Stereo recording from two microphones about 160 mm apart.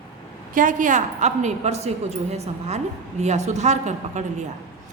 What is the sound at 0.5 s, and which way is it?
A woman's voice, 55° right (ahead or behind).